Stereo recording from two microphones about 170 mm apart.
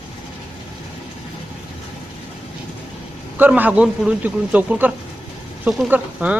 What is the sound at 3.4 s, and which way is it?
Speech, 10° right (ahead or behind).